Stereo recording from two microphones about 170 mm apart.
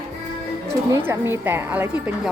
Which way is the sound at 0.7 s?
15° right (ahead or behind).